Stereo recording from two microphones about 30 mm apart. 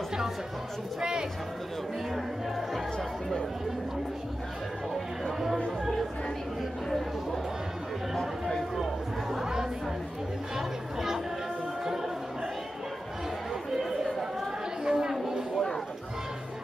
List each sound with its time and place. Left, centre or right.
2.1 s music: centre
8.7 s chatter: centre
10.5 s chatter: centre
14.9 s chatter: centre